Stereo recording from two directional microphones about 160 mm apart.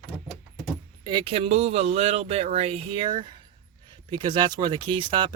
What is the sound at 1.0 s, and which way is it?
Speech, 30° right (ahead or behind).